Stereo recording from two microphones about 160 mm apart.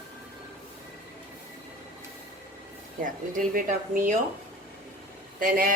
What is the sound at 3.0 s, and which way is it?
Speech, 55° right (ahead or behind).